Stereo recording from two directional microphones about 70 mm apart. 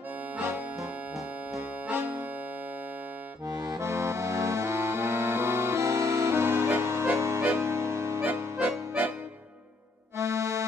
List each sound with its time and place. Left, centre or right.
1.9 s accordion: right
3.4 s accordion: right
3.8 s accordion: right
7.2 s music: right
8.2 s music: right
10.1 s accordion: right